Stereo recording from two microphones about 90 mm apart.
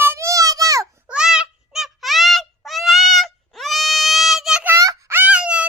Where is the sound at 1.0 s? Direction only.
10° right (ahead or behind).